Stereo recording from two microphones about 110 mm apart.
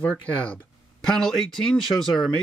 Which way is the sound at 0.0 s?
10° left (ahead or behind).